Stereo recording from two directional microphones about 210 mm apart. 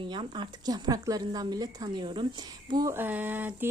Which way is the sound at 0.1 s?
20° right (ahead or behind).